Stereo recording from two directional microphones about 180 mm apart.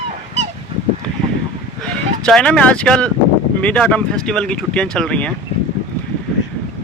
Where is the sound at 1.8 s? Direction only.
5° left (ahead or behind).